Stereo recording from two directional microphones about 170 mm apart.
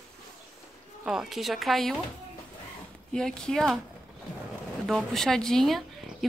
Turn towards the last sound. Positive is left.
turn(degrees=0)  # may be behind; listen again after turning